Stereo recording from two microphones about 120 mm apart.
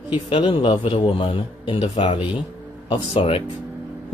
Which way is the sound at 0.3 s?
45° left (ahead or behind).